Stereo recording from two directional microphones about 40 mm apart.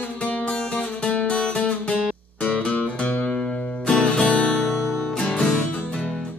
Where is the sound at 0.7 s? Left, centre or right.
Left.